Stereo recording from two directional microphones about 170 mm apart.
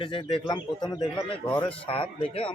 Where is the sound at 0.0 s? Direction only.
30° left (ahead or behind).